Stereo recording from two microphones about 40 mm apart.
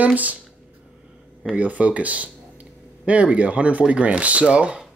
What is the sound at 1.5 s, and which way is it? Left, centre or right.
Speech, right.